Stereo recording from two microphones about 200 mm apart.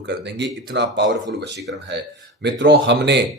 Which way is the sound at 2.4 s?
60° right (ahead or behind).